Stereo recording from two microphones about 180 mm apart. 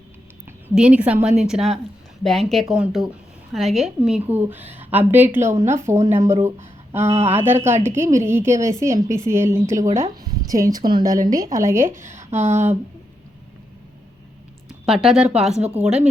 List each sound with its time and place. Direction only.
0.4 s a woman's voice: 5° right (ahead or behind)
12.0 s a sound: 40° right (ahead or behind)
14.8 s a woman's voice: centre (ahead or behind)